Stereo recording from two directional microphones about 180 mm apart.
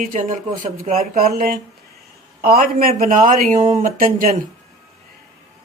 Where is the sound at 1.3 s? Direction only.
55° right (ahead or behind).